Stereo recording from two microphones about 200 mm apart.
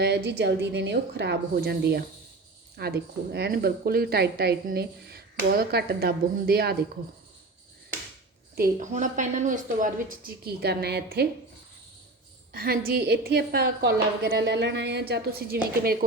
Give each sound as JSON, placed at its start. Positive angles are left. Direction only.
{"t": 0.0, "sound": "a woman's voice", "side_deg": -55}
{"t": 8.5, "sound": "a woman's voice", "side_deg": -45}
{"t": 12.5, "sound": "a woman's voice", "side_deg": -45}